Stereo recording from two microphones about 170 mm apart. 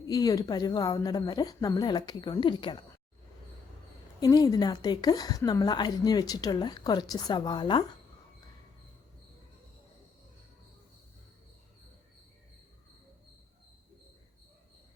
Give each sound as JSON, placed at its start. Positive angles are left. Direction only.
{"t": 0.1, "sound": "a woman's voice", "side_deg": 20}
{"t": 4.2, "sound": "a woman's voice", "side_deg": 20}